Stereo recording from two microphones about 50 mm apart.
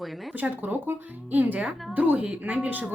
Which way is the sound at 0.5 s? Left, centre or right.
Right.